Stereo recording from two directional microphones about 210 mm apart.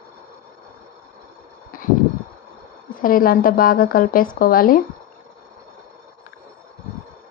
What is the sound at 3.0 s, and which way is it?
Speech, 40° left (ahead or behind).